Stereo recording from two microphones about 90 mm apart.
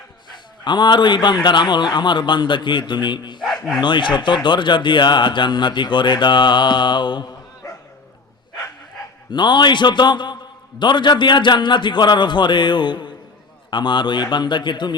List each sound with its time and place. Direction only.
0.3 s a man's voice: 60° left (ahead or behind)
3.4 s speech: centre (ahead or behind)
3.8 s a man's voice: 60° left (ahead or behind)
9.3 s a man's voice: 60° left (ahead or behind)